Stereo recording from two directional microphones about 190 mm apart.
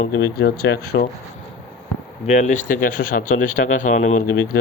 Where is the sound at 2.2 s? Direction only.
40° left (ahead or behind).